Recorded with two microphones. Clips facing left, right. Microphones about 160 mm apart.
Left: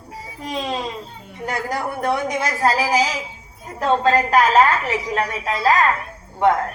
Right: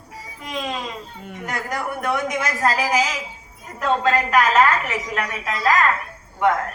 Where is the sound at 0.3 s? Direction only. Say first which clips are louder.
Left 3 dB; 35° left (ahead or behind).